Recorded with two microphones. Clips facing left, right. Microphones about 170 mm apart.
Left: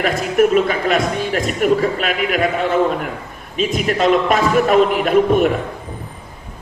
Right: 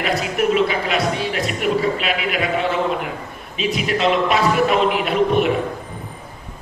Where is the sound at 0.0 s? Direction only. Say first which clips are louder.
Left 5 dB; 45° left (ahead or behind).